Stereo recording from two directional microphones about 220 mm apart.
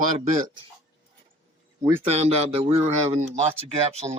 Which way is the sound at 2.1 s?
30° right (ahead or behind).